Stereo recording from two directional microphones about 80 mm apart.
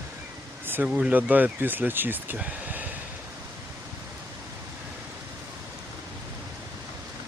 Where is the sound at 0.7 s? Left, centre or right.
Right.